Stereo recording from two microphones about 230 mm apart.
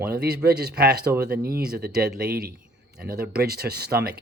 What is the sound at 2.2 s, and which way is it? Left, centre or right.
Speech, right.